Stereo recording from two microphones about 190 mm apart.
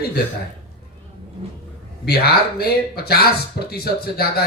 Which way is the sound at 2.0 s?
55° left (ahead or behind).